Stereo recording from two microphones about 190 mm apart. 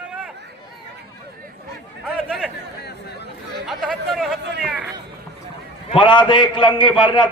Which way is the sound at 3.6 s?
Centre (ahead or behind).